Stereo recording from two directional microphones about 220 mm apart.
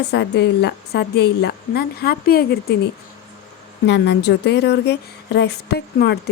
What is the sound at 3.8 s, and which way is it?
A woman's voice, 50° left (ahead or behind).